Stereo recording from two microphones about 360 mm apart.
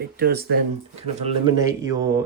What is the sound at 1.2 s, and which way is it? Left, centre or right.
Speech, centre.